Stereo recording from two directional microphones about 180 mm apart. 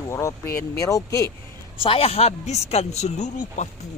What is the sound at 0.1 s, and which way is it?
Speech, 15° left (ahead or behind).